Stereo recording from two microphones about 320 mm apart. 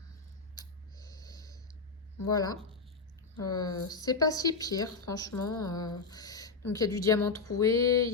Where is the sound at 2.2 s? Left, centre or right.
Centre.